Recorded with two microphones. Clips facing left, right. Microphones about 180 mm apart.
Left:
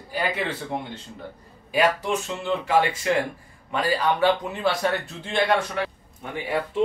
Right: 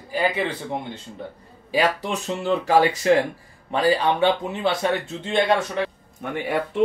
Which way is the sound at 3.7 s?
30° right (ahead or behind).